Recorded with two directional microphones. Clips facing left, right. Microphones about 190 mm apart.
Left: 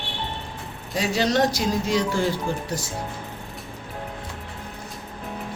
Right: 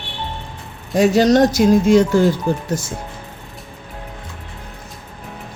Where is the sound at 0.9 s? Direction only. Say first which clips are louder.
Right 10 dB; 45° right (ahead or behind).